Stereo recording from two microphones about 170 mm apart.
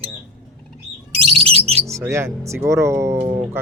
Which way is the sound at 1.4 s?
35° right (ahead or behind).